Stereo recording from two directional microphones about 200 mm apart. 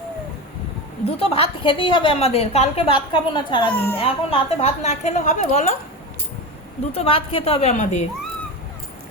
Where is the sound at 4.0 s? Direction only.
30° left (ahead or behind).